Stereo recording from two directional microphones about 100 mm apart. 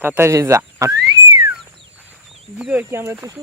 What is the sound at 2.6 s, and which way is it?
Speech, 20° right (ahead or behind).